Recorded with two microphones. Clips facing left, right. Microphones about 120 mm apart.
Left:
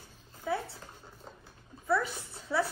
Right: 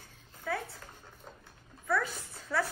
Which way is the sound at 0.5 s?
20° left (ahead or behind).